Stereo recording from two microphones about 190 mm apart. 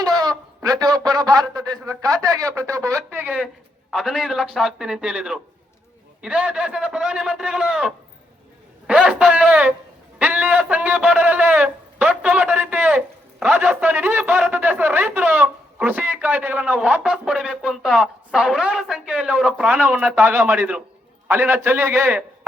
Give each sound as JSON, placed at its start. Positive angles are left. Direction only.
{"t": 0.2, "sound": "a man's voice", "side_deg": -20}
{"t": 8.9, "sound": "a sound", "side_deg": -5}
{"t": 13.4, "sound": "a man's voice", "side_deg": -5}